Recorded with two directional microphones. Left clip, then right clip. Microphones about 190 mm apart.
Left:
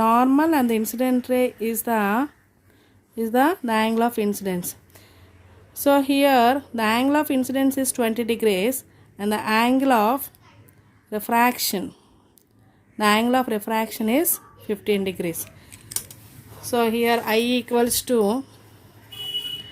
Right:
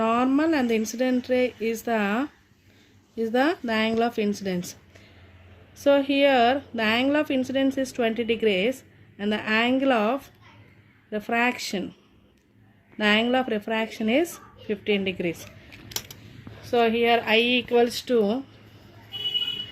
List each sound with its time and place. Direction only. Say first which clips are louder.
0.0 s speech: left 5 dB; 60° left (ahead or behind)
13.0 s speech: left 3 dB; 55° left (ahead or behind)
15.9 s a sound: right 1 dB; 10° right (ahead or behind)
16.6 s speech: even; 70° left (ahead or behind)